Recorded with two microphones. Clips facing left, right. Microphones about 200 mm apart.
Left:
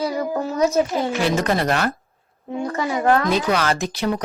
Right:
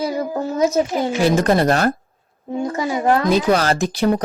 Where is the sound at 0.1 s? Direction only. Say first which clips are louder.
Right 1 dB; 20° right (ahead or behind).